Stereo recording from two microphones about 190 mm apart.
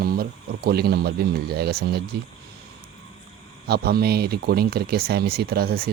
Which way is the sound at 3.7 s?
55° right (ahead or behind).